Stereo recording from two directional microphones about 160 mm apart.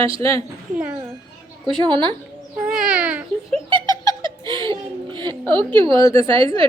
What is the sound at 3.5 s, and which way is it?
Giggle, 30° right (ahead or behind).